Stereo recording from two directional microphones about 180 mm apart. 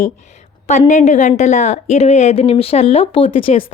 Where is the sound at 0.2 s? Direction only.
40° left (ahead or behind).